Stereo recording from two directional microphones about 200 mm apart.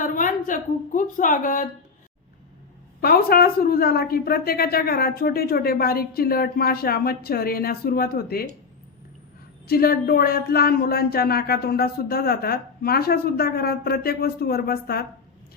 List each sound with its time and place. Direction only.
0.0 s a woman's voice: 40° left (ahead or behind)
3.0 s a woman's voice: 50° left (ahead or behind)
9.6 s a woman's voice: 50° left (ahead or behind)